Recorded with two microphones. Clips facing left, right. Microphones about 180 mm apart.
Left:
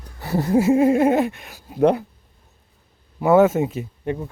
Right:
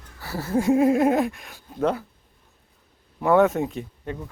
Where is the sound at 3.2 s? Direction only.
5° left (ahead or behind).